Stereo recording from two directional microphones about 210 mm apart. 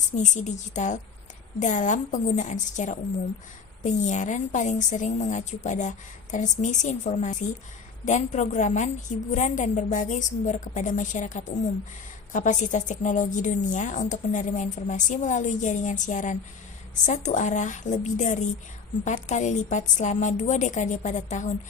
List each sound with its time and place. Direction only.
0.2 s a woman's voice: 35° left (ahead or behind)